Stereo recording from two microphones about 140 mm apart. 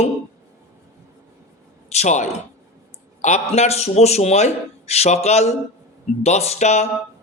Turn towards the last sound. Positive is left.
turn(degrees=55)  # may be behind; listen again after turning